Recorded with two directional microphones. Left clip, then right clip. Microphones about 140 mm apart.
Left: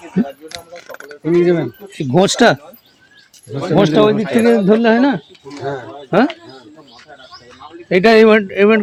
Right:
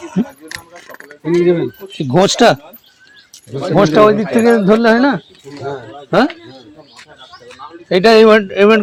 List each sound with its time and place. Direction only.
1.2 s speech: 35° left (ahead or behind)
1.9 s a man's voice: 10° left (ahead or behind)
3.8 s speech: centre (ahead or behind)
7.9 s a man's voice: 10° left (ahead or behind)